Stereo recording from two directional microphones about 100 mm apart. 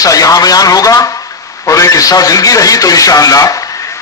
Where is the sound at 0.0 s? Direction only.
35° left (ahead or behind).